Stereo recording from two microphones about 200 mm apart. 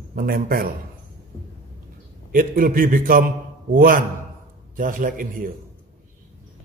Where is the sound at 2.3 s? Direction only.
45° right (ahead or behind).